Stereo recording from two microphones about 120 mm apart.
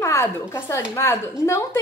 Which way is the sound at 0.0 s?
20° left (ahead or behind).